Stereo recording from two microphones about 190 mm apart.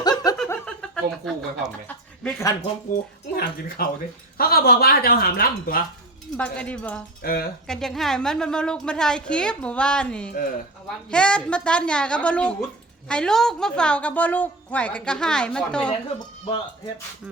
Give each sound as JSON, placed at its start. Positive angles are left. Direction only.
{"t": 0.0, "sound": "snicker", "side_deg": 20}
{"t": 0.4, "sound": "chuckle", "side_deg": 10}
{"t": 1.9, "sound": "speech", "side_deg": 15}
{"t": 3.8, "sound": "speech", "side_deg": 50}
{"t": 6.3, "sound": "cowbell", "side_deg": 5}
{"t": 7.2, "sound": "speech", "side_deg": 50}
{"t": 7.7, "sound": "a woman's voice", "side_deg": 0}
{"t": 15.9, "sound": "speech", "side_deg": 25}